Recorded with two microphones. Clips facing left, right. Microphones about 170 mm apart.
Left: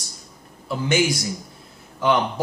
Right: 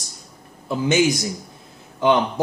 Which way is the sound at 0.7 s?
20° right (ahead or behind).